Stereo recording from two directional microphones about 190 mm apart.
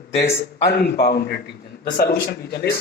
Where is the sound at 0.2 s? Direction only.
60° left (ahead or behind).